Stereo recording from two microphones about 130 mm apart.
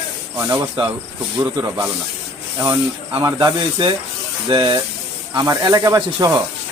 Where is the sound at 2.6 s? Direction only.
35° right (ahead or behind).